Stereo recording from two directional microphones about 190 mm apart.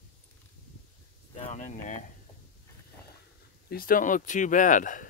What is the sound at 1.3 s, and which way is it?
Speech, 35° left (ahead or behind).